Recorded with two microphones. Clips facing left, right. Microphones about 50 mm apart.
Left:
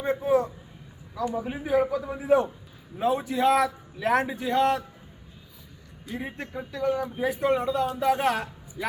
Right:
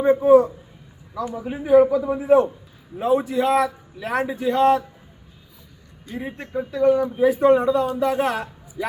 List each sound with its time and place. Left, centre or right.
0.0 s a man's voice: centre
6.1 s a man's voice: centre